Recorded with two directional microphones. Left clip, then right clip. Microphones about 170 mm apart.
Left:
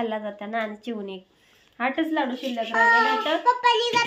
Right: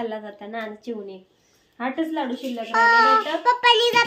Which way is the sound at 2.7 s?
55° right (ahead or behind).